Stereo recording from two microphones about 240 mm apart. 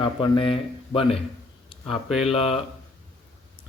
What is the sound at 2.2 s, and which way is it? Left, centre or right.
Speech, left.